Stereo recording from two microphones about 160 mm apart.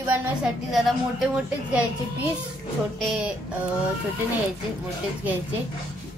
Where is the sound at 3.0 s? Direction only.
Centre (ahead or behind).